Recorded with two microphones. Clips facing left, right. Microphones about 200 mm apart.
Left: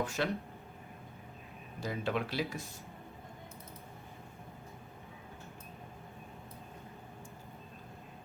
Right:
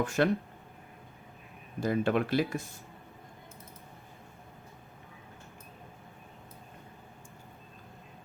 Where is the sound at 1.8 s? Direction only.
55° right (ahead or behind).